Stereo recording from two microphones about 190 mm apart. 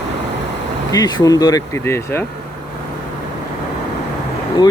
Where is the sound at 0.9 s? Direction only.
20° left (ahead or behind).